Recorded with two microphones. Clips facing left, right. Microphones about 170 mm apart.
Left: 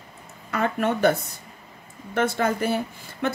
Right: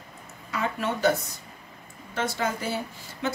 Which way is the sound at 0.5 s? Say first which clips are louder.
Left 5 dB; 55° left (ahead or behind).